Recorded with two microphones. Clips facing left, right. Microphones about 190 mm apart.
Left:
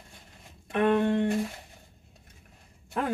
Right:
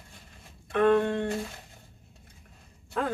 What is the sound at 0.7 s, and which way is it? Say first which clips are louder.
Speech: right 1 dB; 15° left (ahead or behind).